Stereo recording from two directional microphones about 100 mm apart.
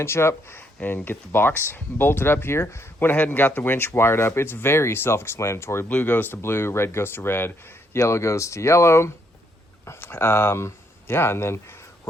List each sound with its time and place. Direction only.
0.0 s speech: 25° left (ahead or behind)